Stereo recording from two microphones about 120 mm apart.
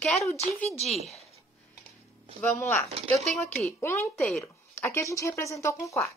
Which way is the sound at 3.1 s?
5° left (ahead or behind).